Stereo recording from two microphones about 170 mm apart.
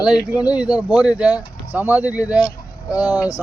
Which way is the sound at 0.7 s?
10° right (ahead or behind).